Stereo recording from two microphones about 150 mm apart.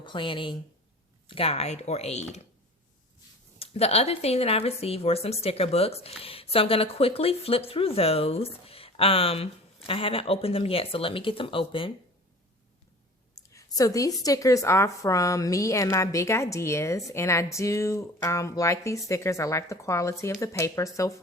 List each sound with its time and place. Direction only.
0.0 s speech: 35° left (ahead or behind)
3.6 s speech: 45° left (ahead or behind)
13.5 s a woman's voice: 20° left (ahead or behind)